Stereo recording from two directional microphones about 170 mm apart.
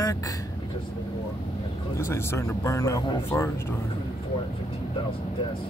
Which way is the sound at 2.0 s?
15° left (ahead or behind).